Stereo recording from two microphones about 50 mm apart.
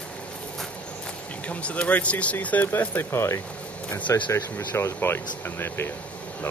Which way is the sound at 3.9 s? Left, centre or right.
Left.